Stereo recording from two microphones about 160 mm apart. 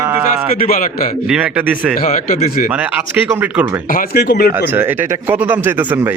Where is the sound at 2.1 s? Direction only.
60° left (ahead or behind).